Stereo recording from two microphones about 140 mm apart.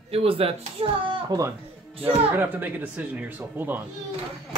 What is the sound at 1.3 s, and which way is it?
Speech, 25° right (ahead or behind).